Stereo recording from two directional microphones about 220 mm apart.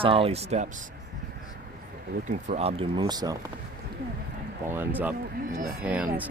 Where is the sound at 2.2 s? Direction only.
35° right (ahead or behind); by 3.4 s 20° right (ahead or behind).